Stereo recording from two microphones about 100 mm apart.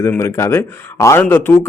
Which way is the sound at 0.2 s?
30° left (ahead or behind).